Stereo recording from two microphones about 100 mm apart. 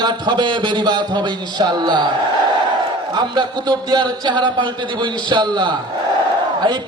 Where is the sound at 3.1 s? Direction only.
50° right (ahead or behind).